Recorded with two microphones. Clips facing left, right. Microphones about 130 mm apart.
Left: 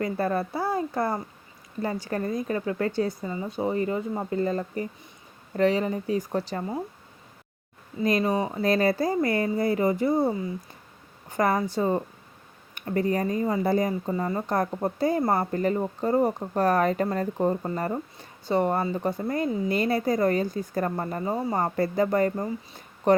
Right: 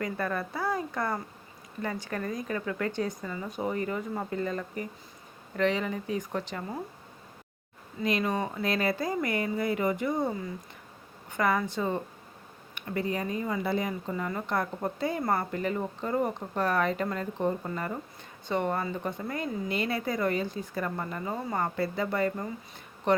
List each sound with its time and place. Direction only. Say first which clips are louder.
0.0 s a woman's voice: left 5 dB; 30° left (ahead or behind)
4.4 s a woman's voice: left 5 dB; 35° left (ahead or behind)
8.0 s a woman's voice: left 5 dB; 40° left (ahead or behind)
8.3 s speech: left 5 dB; 25° left (ahead or behind)
8.6 s a woman's voice: left 7 dB; 35° left (ahead or behind)